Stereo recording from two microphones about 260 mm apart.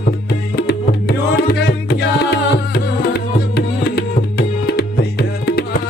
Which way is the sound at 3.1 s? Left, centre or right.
Left.